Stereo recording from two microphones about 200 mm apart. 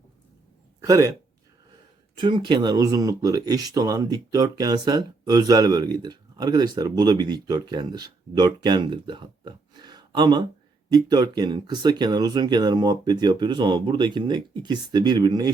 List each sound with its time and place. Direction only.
0.8 s a man's voice: 15° right (ahead or behind)
2.1 s speech: 25° right (ahead or behind)